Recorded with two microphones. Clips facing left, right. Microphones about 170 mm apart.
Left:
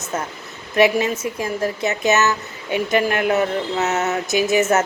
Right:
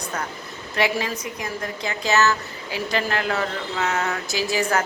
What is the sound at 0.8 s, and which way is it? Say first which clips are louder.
Speech: left 7 dB; 25° left (ahead or behind).